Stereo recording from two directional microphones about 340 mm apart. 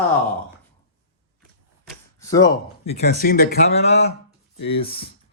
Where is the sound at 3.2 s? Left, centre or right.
Left.